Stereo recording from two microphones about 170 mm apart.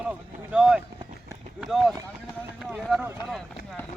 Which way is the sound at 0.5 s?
5° right (ahead or behind).